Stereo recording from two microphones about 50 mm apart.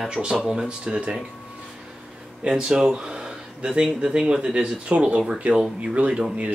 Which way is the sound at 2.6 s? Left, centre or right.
Centre.